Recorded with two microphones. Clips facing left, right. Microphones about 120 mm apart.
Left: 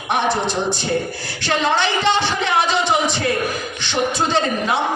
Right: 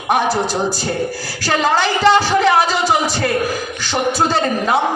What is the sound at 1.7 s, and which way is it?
Speech, 40° right (ahead or behind).